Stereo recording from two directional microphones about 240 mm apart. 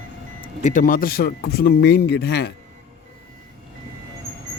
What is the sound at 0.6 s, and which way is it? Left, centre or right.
Speech, left.